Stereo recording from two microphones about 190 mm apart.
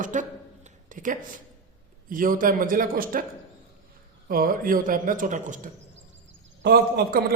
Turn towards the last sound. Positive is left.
turn(degrees=-50)  # may be behind; listen again after turning